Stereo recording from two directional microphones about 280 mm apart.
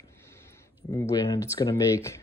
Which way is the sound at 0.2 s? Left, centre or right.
Centre.